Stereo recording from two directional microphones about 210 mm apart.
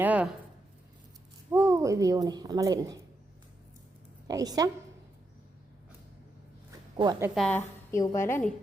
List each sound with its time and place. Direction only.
0.0 s a woman's voice: 5° right (ahead or behind)
1.5 s speech: 15° right (ahead or behind)
4.3 s a woman's voice: 15° right (ahead or behind)
6.7 s a sound: 20° right (ahead or behind)
7.3 s a woman's voice: 5° left (ahead or behind)